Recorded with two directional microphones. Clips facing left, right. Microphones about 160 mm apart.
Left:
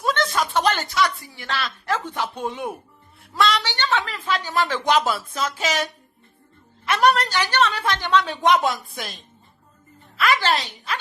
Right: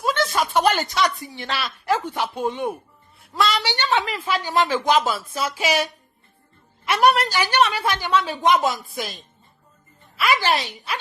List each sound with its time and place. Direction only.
0.0 s a sound: centre (ahead or behind)
0.9 s a woman's voice: 20° right (ahead or behind)
2.4 s a woman's voice: centre (ahead or behind)
3.6 s a woman's voice: 10° right (ahead or behind)
4.8 s a woman's voice: centre (ahead or behind)